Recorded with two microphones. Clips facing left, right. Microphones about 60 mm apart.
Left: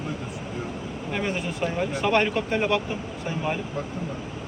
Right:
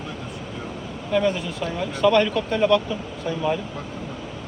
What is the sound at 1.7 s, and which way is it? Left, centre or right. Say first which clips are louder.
Speech: right 5 dB; left.